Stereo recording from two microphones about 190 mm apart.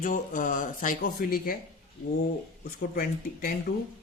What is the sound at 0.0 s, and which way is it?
Speech, 45° left (ahead or behind).